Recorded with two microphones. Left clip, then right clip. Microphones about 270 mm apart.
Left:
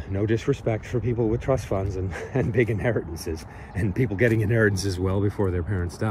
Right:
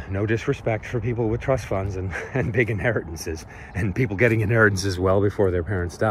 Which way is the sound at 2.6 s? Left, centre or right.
Right.